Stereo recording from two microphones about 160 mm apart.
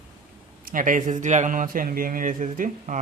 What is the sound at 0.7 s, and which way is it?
Speech, 55° right (ahead or behind).